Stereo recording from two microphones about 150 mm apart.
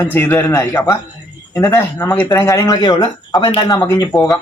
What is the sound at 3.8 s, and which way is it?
Speech, 20° left (ahead or behind).